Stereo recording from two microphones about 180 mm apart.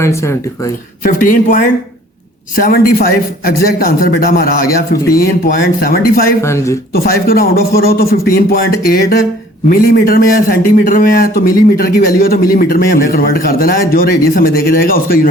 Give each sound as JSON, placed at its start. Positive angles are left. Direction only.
{"t": 0.0, "sound": "speech", "side_deg": 15}
{"t": 1.0, "sound": "a man's voice", "side_deg": 50}
{"t": 6.4, "sound": "speech", "side_deg": 15}
{"t": 6.9, "sound": "a man's voice", "side_deg": 55}